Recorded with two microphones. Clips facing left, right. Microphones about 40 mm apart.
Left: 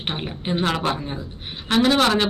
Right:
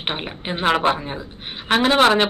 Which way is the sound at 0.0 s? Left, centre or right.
Right.